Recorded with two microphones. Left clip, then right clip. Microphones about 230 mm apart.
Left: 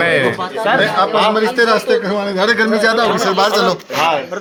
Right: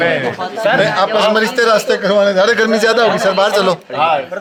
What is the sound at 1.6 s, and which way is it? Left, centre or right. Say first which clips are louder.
A man's voice: right 1 dB; right.